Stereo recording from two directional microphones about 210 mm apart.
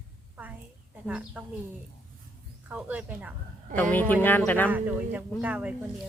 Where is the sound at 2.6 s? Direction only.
5° right (ahead or behind).